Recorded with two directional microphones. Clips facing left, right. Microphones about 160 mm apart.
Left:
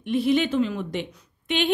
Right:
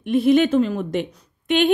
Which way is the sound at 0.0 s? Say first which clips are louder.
Right 6 dB; 50° right (ahead or behind).